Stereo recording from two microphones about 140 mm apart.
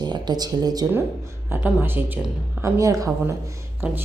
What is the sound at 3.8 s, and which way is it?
Speech, 15° right (ahead or behind).